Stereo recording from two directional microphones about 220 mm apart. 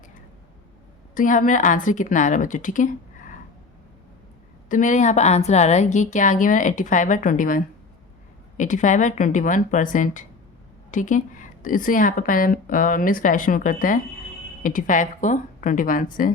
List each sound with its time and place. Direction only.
1.1 s speech: 35° left (ahead or behind)
4.7 s speech: 35° left (ahead or behind)